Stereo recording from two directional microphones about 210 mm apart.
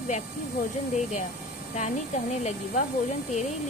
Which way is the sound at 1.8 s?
35° left (ahead or behind).